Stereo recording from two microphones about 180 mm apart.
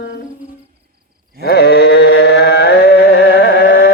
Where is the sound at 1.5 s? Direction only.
65° left (ahead or behind).